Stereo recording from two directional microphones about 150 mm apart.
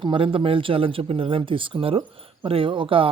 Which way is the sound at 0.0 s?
35° right (ahead or behind).